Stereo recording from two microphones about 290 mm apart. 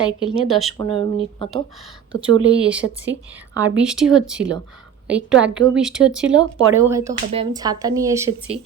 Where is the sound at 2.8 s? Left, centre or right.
Right.